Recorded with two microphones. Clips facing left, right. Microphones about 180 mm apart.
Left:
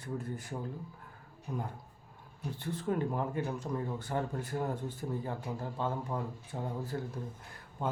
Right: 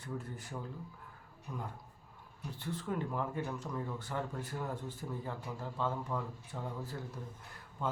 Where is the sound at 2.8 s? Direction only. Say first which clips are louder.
Left 5 dB; 25° left (ahead or behind).